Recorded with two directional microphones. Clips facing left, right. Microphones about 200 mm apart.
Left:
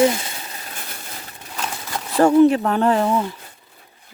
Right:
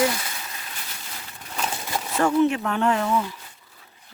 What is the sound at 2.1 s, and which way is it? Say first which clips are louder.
Speech: left 7 dB; 35° left (ahead or behind).